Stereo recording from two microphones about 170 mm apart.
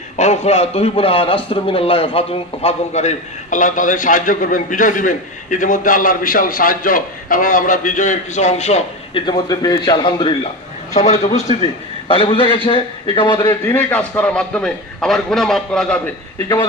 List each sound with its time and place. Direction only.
0.2 s a man's voice: 40° left (ahead or behind)
9.2 s a man's voice: 25° left (ahead or behind); by 16.0 s 5° left (ahead or behind)